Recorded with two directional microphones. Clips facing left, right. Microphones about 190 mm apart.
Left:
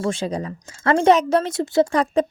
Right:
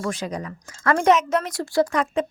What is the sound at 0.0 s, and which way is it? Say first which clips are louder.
A woman's voice: left 4 dB; 30° left (ahead or behind).